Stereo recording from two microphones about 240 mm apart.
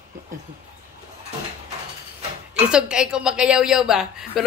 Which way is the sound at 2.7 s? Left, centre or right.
Centre.